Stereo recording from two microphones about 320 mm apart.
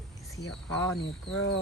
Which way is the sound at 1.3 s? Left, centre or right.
Left.